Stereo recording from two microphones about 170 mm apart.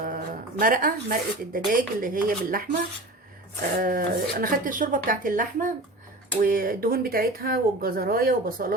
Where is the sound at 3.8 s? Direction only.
60° right (ahead or behind).